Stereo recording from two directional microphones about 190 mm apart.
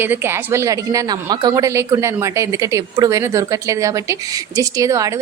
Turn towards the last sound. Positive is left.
turn(degrees=-15)  # may be behind; listen again after turning